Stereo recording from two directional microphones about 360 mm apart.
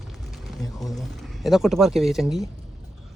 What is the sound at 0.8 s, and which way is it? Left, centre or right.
Speech, centre.